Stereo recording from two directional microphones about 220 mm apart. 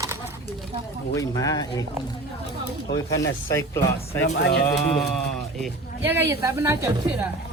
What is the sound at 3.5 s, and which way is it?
Speech, 10° left (ahead or behind).